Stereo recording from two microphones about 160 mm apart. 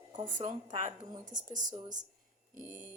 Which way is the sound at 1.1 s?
25° right (ahead or behind).